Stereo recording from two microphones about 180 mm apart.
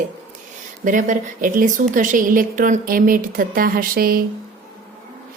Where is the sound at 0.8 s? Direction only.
45° right (ahead or behind).